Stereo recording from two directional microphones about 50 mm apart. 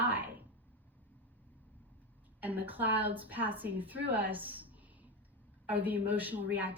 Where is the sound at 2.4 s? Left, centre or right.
Right.